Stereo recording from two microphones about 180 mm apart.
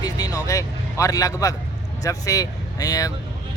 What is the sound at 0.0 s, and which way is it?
A man's voice, 20° left (ahead or behind).